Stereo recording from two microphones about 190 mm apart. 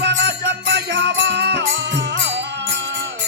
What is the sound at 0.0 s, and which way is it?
Music, 65° right (ahead or behind).